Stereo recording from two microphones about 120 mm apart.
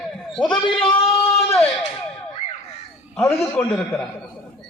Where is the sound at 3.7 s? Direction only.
10° left (ahead or behind).